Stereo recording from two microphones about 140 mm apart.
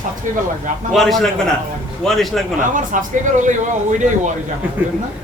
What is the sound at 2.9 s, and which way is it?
A man's voice, 70° right (ahead or behind).